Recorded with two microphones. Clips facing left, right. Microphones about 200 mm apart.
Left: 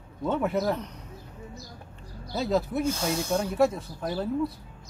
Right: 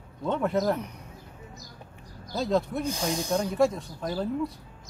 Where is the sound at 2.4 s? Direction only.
5° left (ahead or behind).